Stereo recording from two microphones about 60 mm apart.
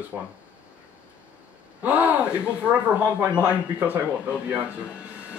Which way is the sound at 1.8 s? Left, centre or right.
Right.